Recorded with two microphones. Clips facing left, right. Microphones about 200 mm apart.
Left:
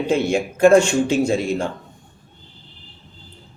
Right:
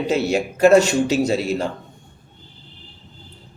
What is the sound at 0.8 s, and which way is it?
Speech, 40° right (ahead or behind).